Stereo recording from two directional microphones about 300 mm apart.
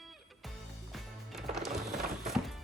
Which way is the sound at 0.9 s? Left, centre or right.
Centre.